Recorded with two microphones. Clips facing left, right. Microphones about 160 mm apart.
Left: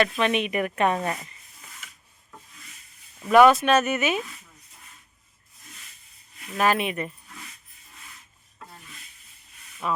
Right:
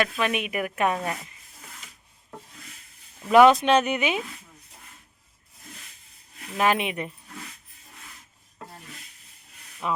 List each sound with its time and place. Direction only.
0.0 s speech: 5° right (ahead or behind)
3.2 s speech: 10° right (ahead or behind)
6.6 s speech: 15° right (ahead or behind)
9.8 s speech: 15° right (ahead or behind)